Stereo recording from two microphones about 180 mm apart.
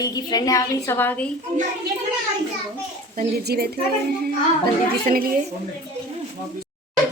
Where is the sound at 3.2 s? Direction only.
60° right (ahead or behind).